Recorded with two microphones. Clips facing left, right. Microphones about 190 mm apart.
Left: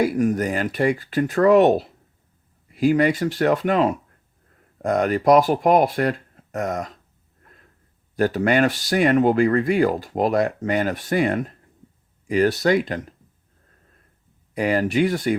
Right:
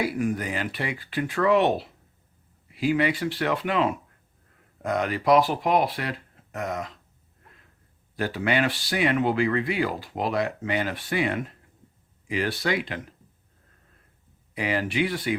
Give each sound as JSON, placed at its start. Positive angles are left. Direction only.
{"t": 0.0, "sound": "speech", "side_deg": 45}
{"t": 8.1, "sound": "speech", "side_deg": 45}
{"t": 14.5, "sound": "speech", "side_deg": 45}